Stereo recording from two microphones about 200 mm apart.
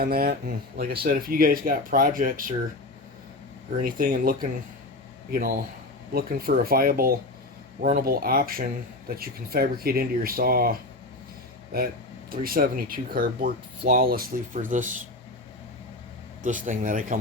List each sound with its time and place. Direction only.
0.0 s speech: 50° right (ahead or behind)
3.7 s speech: 45° right (ahead or behind)
16.4 s speech: 40° right (ahead or behind)